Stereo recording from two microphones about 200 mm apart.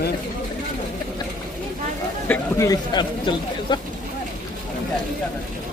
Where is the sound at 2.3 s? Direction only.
15° left (ahead or behind).